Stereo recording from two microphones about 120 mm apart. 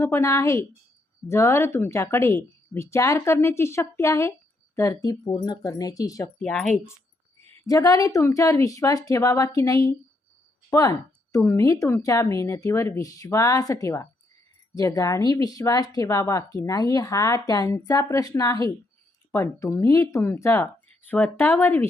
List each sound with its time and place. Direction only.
0.0 s speech: 20° left (ahead or behind)
6.4 s speech: 5° left (ahead or behind)
7.7 s speech: 30° left (ahead or behind)